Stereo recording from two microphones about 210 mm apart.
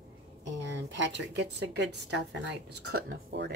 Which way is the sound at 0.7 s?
60° right (ahead or behind).